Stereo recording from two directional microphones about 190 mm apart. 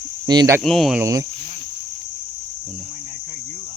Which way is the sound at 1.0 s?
15° right (ahead or behind).